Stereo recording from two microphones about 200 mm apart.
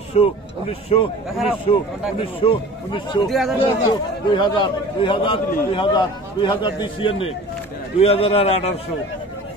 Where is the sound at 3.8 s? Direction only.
25° left (ahead or behind).